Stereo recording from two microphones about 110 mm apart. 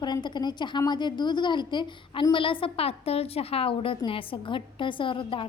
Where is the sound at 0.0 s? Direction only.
40° left (ahead or behind).